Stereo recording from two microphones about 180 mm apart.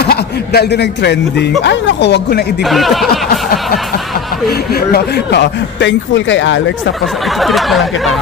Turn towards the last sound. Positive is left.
turn(degrees=0)  # may be behind; listen again after turning